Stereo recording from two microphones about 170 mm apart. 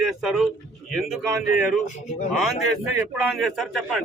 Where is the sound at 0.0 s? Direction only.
5° right (ahead or behind).